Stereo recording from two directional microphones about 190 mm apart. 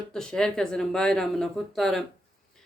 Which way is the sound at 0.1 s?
5° left (ahead or behind).